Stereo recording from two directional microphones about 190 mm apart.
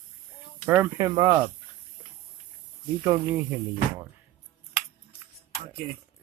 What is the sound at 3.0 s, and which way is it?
Speech, 15° right (ahead or behind).